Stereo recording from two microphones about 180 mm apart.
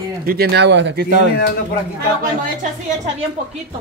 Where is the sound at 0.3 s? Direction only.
65° right (ahead or behind).